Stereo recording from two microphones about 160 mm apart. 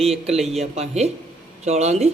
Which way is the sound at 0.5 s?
40° right (ahead or behind).